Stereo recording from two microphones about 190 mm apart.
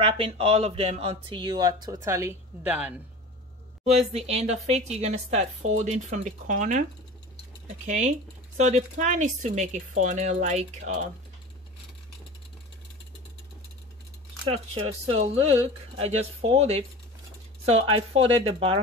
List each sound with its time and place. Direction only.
0.0 s speech: 30° right (ahead or behind); by 2.9 s 10° right (ahead or behind)
3.8 s speech: 35° right (ahead or behind)
14.4 s speech: 30° right (ahead or behind)